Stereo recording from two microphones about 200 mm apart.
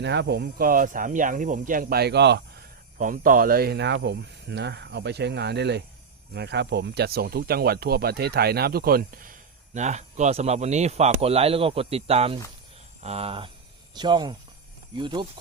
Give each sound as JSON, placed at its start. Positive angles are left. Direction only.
{"t": 0.0, "sound": "speech", "side_deg": -60}
{"t": 3.0, "sound": "speech", "side_deg": -45}